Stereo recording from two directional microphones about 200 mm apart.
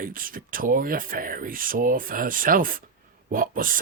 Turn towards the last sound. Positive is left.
turn(degrees=-45)  # may be behind; listen again after turning